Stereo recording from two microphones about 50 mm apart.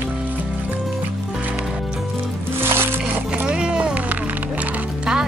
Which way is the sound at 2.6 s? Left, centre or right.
Right.